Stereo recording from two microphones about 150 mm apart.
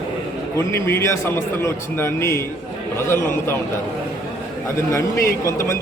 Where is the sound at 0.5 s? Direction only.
20° left (ahead or behind).